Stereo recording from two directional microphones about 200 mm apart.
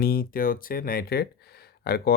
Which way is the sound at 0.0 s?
45° left (ahead or behind).